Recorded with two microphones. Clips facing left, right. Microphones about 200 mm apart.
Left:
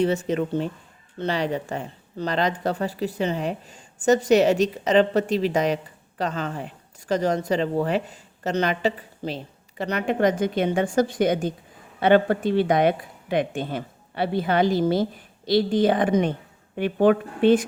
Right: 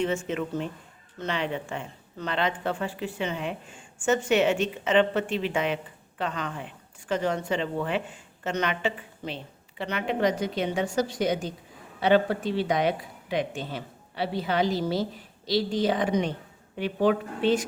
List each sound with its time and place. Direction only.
0.0 s speech: 35° left (ahead or behind); by 17.7 s 55° left (ahead or behind)